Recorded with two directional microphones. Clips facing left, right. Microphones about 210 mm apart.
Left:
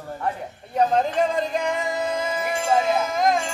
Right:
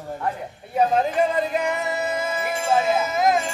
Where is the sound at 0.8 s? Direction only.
5° right (ahead or behind).